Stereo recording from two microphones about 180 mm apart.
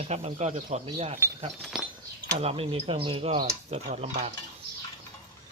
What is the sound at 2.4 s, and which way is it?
A man's voice, 30° right (ahead or behind).